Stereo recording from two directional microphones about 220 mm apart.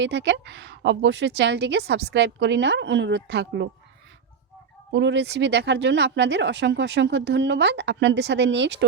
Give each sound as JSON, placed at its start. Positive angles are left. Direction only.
{"t": 0.0, "sound": "speech", "side_deg": -55}
{"t": 4.9, "sound": "speech", "side_deg": -55}